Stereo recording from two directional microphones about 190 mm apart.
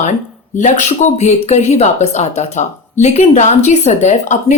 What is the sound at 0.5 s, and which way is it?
A woman's voice, 40° left (ahead or behind).